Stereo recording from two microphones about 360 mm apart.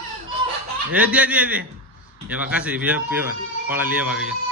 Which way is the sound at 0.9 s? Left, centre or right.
Centre.